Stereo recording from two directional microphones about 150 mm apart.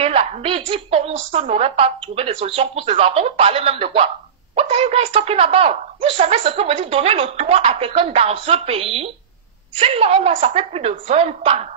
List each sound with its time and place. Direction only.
0.0 s a woman's voice: 40° right (ahead or behind)